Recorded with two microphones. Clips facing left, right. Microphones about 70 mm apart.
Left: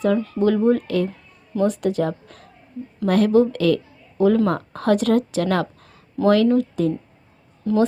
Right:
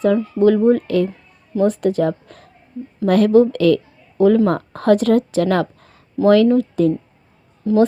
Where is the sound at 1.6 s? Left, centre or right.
Right.